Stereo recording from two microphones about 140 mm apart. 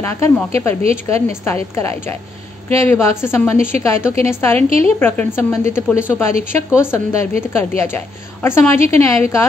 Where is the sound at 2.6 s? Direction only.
20° left (ahead or behind).